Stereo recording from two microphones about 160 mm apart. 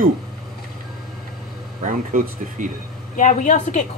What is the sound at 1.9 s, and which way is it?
Speech, 55° right (ahead or behind).